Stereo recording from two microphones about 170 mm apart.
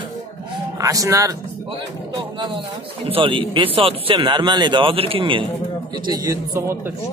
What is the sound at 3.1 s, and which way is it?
Speech, 30° right (ahead or behind).